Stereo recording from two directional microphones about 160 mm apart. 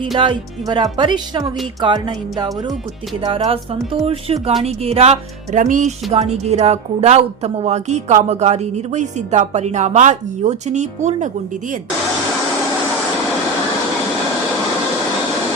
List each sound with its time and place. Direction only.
0.2 s speech: 30° right (ahead or behind)
4.0 s speech: 35° right (ahead or behind)